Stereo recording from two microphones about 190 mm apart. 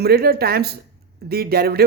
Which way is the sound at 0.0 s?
55° right (ahead or behind).